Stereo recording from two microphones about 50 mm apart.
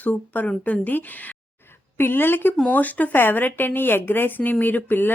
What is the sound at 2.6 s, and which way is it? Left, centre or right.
Speech, left.